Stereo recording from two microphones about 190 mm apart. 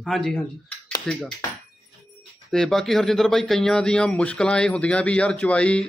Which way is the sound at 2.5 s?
Centre (ahead or behind).